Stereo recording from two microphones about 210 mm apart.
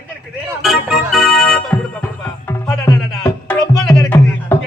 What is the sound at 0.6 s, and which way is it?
Music, centre (ahead or behind).